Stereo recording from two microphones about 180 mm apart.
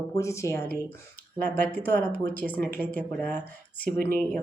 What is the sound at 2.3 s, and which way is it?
Speech, 10° left (ahead or behind).